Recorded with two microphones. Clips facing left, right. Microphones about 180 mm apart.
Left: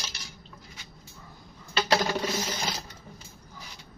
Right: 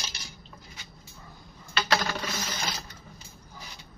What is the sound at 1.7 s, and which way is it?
Coin, 30° left (ahead or behind).